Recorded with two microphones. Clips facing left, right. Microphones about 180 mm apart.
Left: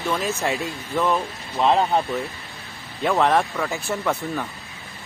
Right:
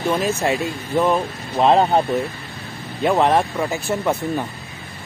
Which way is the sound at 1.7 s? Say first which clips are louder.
Right 4 dB; 35° right (ahead or behind).